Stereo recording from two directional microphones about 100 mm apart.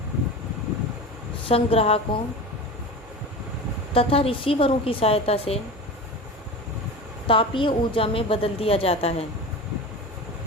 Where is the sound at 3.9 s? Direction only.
70° left (ahead or behind).